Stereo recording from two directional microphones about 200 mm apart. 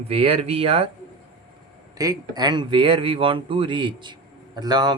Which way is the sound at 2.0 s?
20° right (ahead or behind).